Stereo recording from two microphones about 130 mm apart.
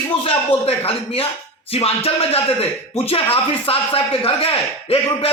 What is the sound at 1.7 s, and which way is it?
A man's voice, 50° left (ahead or behind).